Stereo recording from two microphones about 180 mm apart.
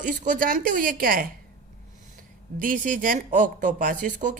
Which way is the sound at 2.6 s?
50° right (ahead or behind).